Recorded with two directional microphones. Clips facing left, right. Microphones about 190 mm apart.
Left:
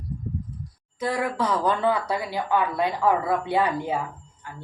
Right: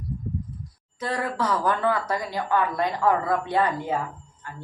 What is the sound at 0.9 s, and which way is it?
A woman's voice, 15° left (ahead or behind).